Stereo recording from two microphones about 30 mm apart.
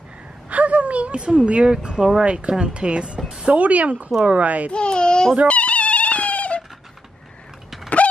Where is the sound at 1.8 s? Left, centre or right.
Right.